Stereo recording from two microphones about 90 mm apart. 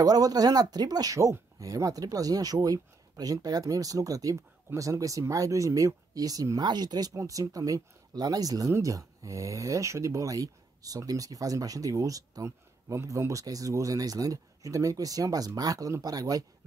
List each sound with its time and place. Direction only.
0.0 s speech: 45° right (ahead or behind)
6.6 s speech: 50° right (ahead or behind)